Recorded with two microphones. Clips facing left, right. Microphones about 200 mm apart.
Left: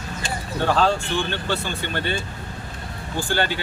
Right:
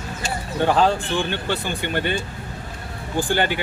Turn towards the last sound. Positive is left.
turn(degrees=-15)  # may be behind; listen again after turning